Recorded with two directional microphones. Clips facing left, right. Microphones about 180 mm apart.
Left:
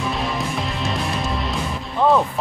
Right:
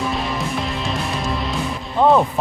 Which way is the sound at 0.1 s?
Centre (ahead or behind).